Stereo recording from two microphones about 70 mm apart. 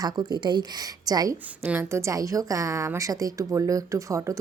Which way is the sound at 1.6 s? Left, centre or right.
Right.